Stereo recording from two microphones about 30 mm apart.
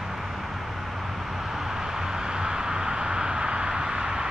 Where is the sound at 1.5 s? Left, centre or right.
Centre.